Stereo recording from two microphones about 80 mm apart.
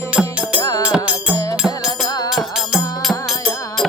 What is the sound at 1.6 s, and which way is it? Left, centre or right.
Music, centre.